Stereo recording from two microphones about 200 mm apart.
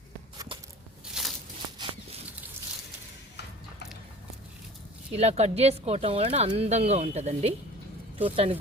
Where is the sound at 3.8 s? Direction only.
55° left (ahead or behind).